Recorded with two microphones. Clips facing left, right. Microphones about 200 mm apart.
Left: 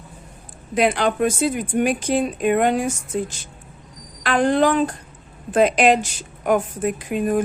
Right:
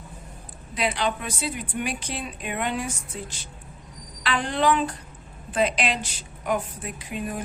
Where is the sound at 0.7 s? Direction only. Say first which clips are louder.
Left 7 dB; 50° left (ahead or behind).